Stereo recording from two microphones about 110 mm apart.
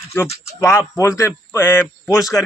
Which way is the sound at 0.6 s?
25° left (ahead or behind).